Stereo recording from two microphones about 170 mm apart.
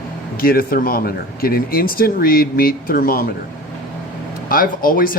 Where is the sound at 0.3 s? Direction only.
60° left (ahead or behind).